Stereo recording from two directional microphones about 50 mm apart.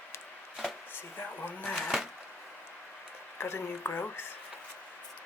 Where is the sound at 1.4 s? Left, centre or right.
Left.